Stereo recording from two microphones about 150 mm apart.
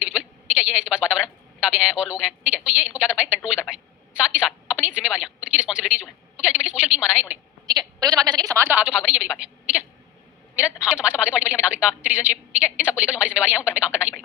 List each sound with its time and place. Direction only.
0.1 s a sound: 5° right (ahead or behind)
1.7 s a woman's voice: 5° right (ahead or behind)
7.7 s a woman's voice: 25° right (ahead or behind); by 14.1 s 5° right (ahead or behind)